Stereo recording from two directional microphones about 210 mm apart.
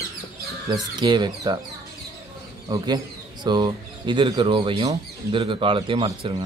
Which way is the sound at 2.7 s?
20° right (ahead or behind).